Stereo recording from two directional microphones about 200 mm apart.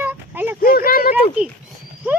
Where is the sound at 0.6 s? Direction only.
45° left (ahead or behind).